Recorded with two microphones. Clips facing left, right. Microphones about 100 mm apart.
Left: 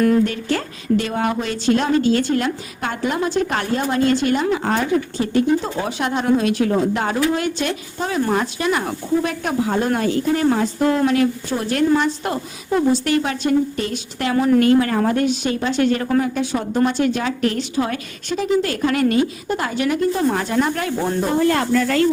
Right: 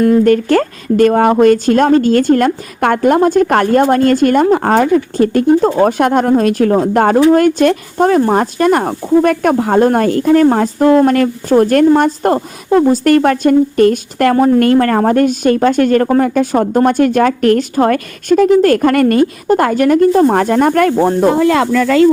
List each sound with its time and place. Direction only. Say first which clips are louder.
0.3 s speech: right 13 dB; 50° right (ahead or behind)